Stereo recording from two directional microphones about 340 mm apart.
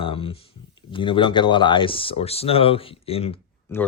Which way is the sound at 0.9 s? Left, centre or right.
Centre.